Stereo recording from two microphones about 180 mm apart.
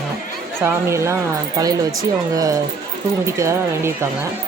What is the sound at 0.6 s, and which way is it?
Speech, 15° right (ahead or behind).